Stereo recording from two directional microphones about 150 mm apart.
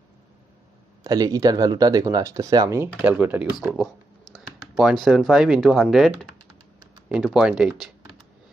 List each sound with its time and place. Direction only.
1.0 s speech: 25° right (ahead or behind)
2.8 s speech: 10° right (ahead or behind)
7.2 s speech: 5° right (ahead or behind)